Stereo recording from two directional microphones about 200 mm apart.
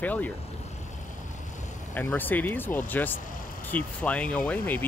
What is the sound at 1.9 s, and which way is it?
Speech, 10° left (ahead or behind).